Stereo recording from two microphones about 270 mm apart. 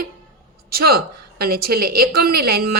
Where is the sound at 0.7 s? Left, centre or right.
Right.